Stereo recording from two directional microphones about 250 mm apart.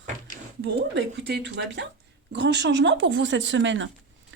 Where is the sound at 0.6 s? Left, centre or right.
Right.